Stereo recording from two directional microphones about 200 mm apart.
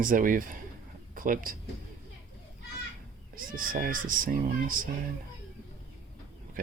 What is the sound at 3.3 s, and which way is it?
Speech, 45° right (ahead or behind).